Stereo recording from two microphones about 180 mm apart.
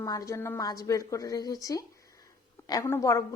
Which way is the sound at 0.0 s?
20° left (ahead or behind).